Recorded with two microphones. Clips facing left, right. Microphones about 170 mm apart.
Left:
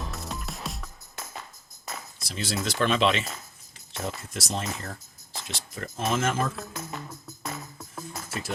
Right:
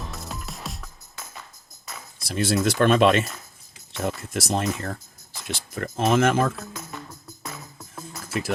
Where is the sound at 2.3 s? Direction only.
55° right (ahead or behind).